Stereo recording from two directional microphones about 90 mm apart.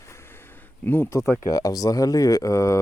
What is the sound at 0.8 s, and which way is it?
Speech, 25° left (ahead or behind).